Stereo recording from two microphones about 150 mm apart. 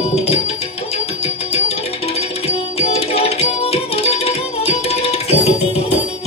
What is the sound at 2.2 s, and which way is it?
Music, 40° left (ahead or behind).